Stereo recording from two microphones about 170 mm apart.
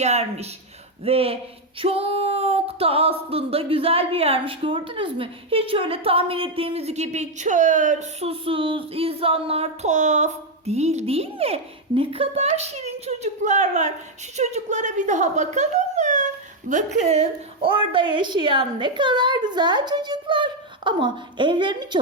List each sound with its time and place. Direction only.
0.0 s music: 40° right (ahead or behind)
14.3 s speech: 45° right (ahead or behind); by 22.0 s 25° right (ahead or behind)